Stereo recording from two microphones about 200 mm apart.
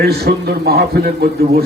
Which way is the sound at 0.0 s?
50° right (ahead or behind).